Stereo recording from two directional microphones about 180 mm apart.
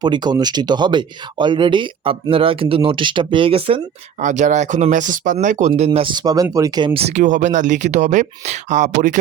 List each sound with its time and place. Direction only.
0.0 s speech: 25° right (ahead or behind)
4.2 s speech: 45° right (ahead or behind)